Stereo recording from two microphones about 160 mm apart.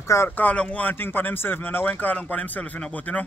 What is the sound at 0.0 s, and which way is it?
Speech, 15° left (ahead or behind).